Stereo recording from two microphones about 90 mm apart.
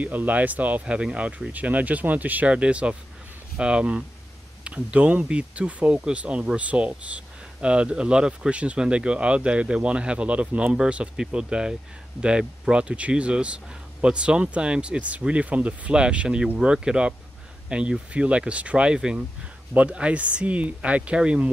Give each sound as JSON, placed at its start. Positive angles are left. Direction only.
{"t": 0.0, "sound": "speech", "side_deg": -20}